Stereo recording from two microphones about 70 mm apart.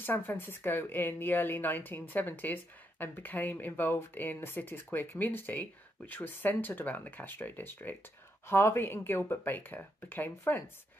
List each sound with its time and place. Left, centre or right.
0.0 s speech: left